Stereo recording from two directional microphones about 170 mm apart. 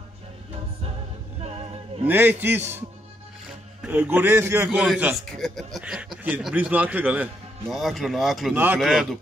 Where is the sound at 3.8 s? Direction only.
10° right (ahead or behind).